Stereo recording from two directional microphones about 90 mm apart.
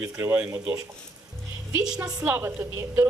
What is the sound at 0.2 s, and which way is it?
Speech, 25° right (ahead or behind).